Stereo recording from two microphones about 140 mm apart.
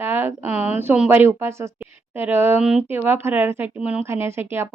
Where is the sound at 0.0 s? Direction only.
15° right (ahead or behind).